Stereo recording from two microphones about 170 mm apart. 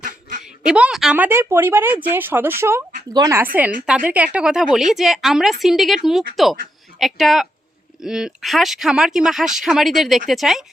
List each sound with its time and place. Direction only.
0.0 s quack: 50° right (ahead or behind)
0.4 s a woman's voice: 5° right (ahead or behind)